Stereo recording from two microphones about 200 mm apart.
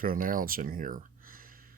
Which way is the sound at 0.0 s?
45° right (ahead or behind).